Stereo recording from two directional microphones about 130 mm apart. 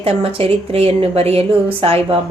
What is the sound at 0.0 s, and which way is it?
A woman's voice, 50° right (ahead or behind).